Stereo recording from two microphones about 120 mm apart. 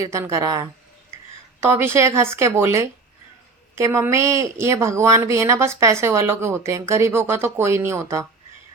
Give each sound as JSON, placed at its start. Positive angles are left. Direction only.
{"t": 0.0, "sound": "speech", "side_deg": -25}